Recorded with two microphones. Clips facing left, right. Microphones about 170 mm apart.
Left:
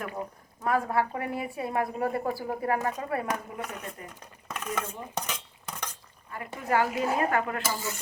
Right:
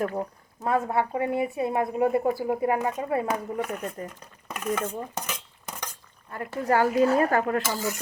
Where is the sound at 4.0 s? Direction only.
40° right (ahead or behind).